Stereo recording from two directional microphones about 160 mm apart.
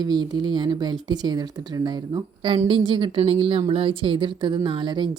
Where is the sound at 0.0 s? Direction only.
25° right (ahead or behind).